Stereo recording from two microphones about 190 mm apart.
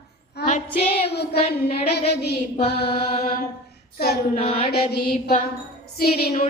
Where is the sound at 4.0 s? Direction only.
55° left (ahead or behind).